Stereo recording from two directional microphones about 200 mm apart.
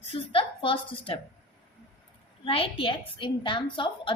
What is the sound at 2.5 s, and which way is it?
A woman's voice, 25° left (ahead or behind).